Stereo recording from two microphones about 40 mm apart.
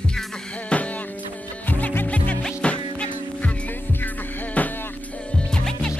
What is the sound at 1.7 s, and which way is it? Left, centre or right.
Music, left.